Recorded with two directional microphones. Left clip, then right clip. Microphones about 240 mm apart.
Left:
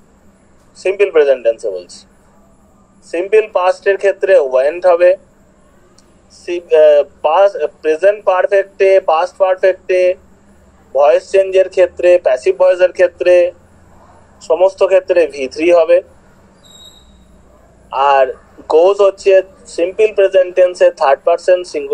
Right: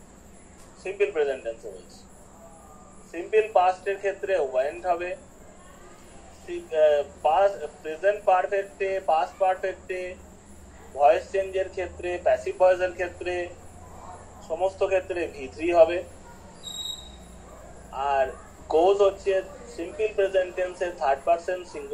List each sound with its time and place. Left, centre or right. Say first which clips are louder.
0.8 s a man's voice: left 15 dB; left
3.1 s a man's voice: left 11 dB; left
6.4 s a man's voice: left 13 dB; left
14.5 s a man's voice: left 15 dB; left
17.8 s a man's voice: left 14 dB; left